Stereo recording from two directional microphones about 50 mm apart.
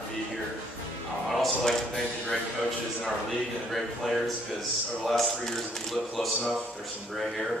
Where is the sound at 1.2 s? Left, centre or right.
Centre.